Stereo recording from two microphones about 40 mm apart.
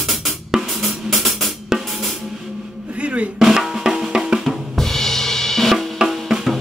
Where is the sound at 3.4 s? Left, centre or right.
Centre.